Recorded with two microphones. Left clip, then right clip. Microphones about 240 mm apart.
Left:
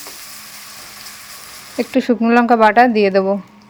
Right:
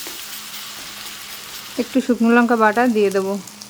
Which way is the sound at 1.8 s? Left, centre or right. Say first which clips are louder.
Left 3 dB; centre.